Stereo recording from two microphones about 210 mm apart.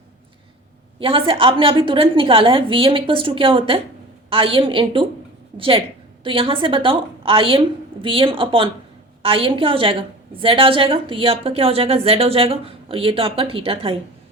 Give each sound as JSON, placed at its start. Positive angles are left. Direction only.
{"t": 0.9, "sound": "a woman's voice", "side_deg": -25}